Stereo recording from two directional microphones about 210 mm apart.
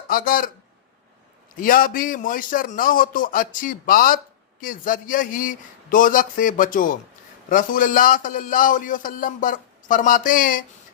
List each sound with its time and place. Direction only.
0.1 s a man's voice: 40° left (ahead or behind)
1.6 s a man's voice: 40° left (ahead or behind)